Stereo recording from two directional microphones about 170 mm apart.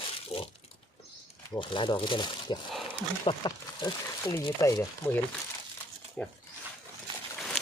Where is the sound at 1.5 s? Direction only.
30° left (ahead or behind).